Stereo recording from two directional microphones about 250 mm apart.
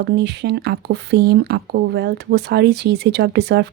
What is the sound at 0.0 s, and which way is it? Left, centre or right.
Speech, right.